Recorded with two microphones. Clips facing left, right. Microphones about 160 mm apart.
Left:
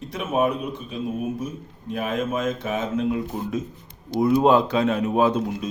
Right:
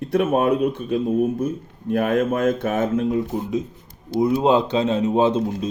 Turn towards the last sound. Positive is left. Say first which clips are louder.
# right 2 dB
turn(degrees=-25)  # may be behind; listen again after turning